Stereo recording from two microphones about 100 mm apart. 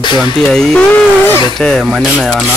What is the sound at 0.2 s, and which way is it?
Speech, 5° left (ahead or behind).